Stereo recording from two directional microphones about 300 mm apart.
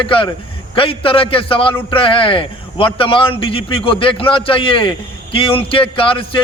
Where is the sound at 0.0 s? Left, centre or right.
Centre.